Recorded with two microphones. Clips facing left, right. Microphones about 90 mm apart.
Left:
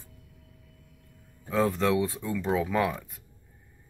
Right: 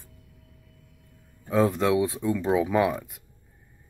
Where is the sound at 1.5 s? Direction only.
15° right (ahead or behind).